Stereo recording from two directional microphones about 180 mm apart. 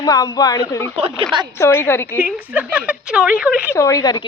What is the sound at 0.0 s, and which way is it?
Speech, 20° left (ahead or behind).